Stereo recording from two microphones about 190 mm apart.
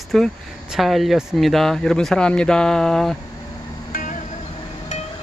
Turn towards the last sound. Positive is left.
turn(degrees=45)  # may be behind; listen again after turning